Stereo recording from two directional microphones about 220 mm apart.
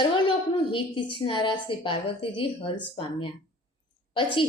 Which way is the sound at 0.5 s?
25° left (ahead or behind).